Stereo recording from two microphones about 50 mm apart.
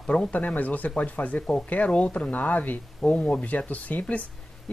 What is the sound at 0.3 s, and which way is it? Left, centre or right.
Speech, left.